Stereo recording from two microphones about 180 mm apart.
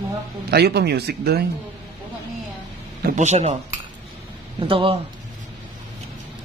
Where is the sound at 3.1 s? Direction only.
40° right (ahead or behind).